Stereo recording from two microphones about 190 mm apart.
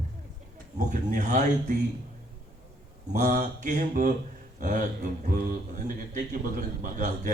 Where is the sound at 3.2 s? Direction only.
40° right (ahead or behind).